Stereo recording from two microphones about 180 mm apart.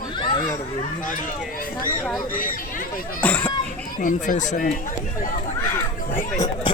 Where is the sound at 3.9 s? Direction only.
45° left (ahead or behind).